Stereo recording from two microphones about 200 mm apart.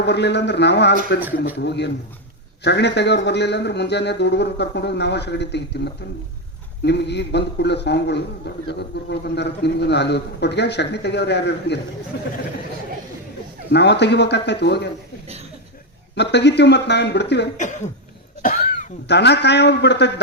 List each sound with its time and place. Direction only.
0.0 s a man's voice: 60° left (ahead or behind)
13.7 s a man's voice: 55° left (ahead or behind)
16.1 s a man's voice: 60° left (ahead or behind)
17.6 s a man's voice: 40° left (ahead or behind); by 20.1 s 60° left (ahead or behind)